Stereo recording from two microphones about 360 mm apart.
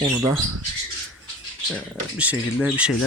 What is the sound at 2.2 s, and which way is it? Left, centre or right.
Speech, centre.